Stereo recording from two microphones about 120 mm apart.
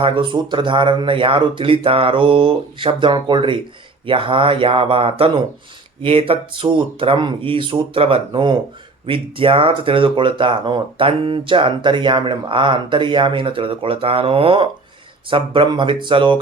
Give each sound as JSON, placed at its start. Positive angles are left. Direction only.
{"t": 0.0, "sound": "speech", "side_deg": -40}